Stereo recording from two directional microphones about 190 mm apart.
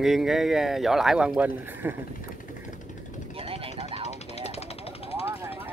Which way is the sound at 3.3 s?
30° right (ahead or behind).